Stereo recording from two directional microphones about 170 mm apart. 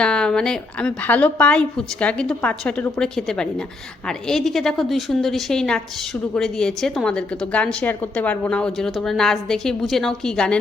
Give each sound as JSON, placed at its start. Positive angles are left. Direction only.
{"t": 0.0, "sound": "a woman's voice", "side_deg": 5}